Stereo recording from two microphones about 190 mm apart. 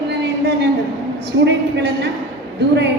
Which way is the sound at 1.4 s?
65° right (ahead or behind).